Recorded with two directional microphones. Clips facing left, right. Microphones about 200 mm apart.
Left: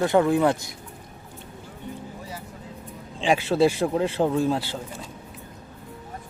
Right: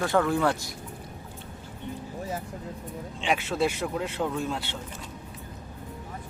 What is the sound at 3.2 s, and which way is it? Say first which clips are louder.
Speech: left 6 dB; 30° left (ahead or behind).